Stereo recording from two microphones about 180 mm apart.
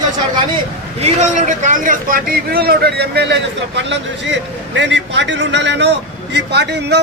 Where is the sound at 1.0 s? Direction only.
40° right (ahead or behind).